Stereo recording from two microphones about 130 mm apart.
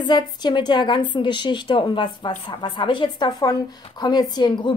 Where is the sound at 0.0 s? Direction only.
35° left (ahead or behind).